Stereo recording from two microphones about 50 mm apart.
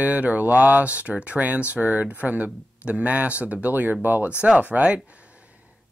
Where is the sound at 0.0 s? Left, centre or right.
Right.